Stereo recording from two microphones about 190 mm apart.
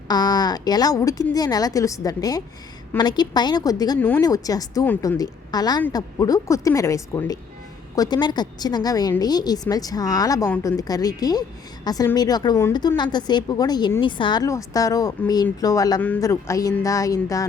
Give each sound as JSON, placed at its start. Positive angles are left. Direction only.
{"t": 0.1, "sound": "speech", "side_deg": 20}